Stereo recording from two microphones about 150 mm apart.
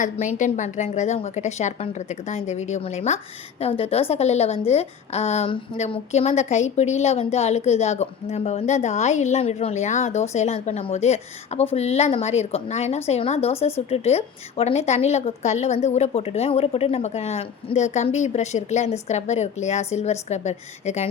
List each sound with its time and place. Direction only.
0.0 s speech: 55° left (ahead or behind)